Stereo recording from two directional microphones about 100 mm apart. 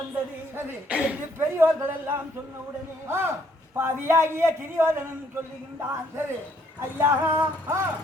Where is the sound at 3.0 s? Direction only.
25° right (ahead or behind).